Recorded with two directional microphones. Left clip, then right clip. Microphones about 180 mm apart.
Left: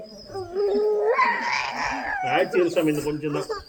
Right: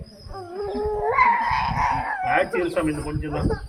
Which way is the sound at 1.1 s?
10° right (ahead or behind).